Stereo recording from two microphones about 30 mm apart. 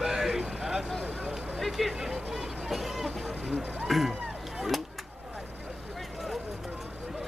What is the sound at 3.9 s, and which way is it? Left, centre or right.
Music, centre.